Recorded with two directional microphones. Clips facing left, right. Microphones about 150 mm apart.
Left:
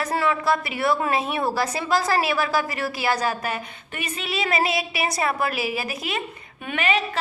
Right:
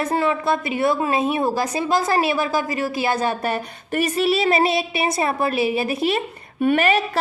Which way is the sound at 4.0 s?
35° right (ahead or behind).